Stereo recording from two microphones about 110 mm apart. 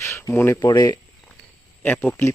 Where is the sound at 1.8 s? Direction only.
20° left (ahead or behind).